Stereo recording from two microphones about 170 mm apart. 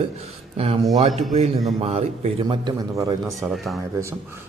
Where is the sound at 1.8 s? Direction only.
40° right (ahead or behind); by 3.2 s 20° right (ahead or behind).